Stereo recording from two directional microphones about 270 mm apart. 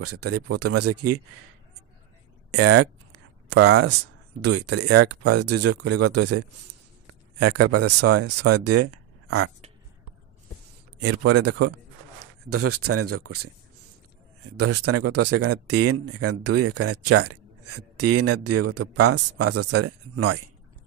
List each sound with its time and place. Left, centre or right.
0.0 s speech: right
2.5 s a sound: right
4.4 s speech: right
11.0 s speech: right
14.6 s speech: right